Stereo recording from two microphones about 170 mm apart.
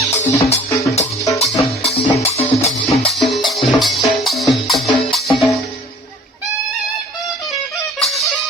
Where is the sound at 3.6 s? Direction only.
Centre (ahead or behind).